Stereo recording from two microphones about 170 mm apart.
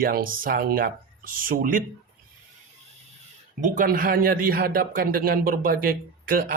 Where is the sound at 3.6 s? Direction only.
50° right (ahead or behind).